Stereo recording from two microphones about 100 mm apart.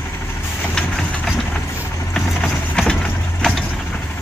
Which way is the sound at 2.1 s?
5° left (ahead or behind).